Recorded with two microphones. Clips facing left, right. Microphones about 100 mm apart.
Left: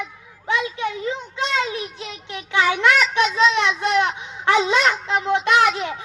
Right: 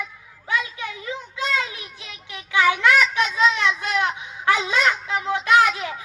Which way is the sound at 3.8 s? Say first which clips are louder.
Left 5 dB; 25° left (ahead or behind).